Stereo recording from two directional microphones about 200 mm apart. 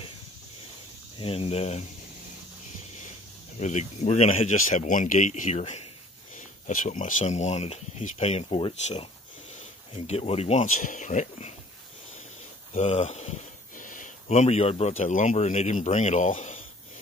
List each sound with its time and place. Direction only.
1.2 s speech: 30° left (ahead or behind)
3.5 s speech: 35° left (ahead or behind)
12.7 s speech: 35° left (ahead or behind)